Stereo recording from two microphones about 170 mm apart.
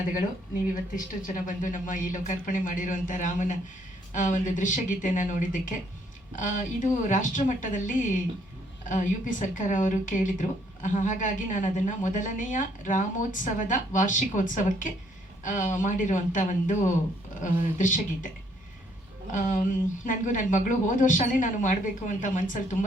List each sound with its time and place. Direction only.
0.0 s a woman's voice: 55° left (ahead or behind)
1.5 s a woman's voice: 50° left (ahead or behind)
19.3 s a woman's voice: 50° left (ahead or behind)